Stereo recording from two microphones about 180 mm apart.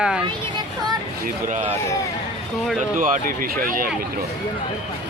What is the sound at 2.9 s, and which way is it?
Speech, 50° right (ahead or behind).